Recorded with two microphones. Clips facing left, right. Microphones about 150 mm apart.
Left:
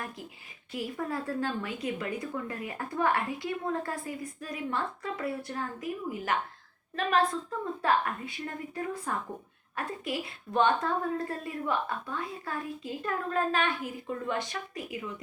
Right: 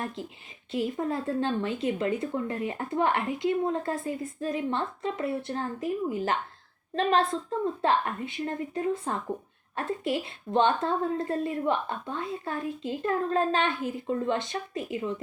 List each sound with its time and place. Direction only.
0.2 s speech: 25° right (ahead or behind)